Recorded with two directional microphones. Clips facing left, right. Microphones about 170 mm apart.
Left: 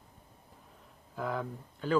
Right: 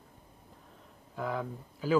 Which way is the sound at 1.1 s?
Centre (ahead or behind).